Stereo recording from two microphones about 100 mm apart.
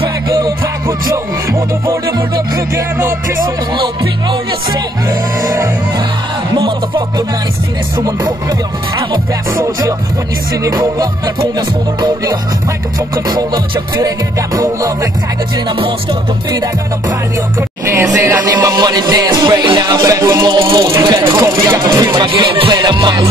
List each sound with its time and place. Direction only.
0.3 s music: 35° right (ahead or behind)
3.4 s music: 55° right (ahead or behind)
5.5 s speech: 35° right (ahead or behind)
8.0 s music: 40° right (ahead or behind)
10.6 s music: 40° right (ahead or behind)
13.1 s speech: 40° right (ahead or behind)
15.5 s music: 50° right (ahead or behind)
17.6 s music: 25° right (ahead or behind)
18.1 s speech: 20° right (ahead or behind)
18.4 s speech: 40° right (ahead or behind)
21.0 s music: 50° right (ahead or behind)
21.4 s speech: 30° right (ahead or behind)
22.1 s music: 50° right (ahead or behind)